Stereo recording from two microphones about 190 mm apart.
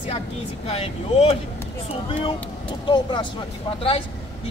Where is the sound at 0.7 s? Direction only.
30° left (ahead or behind).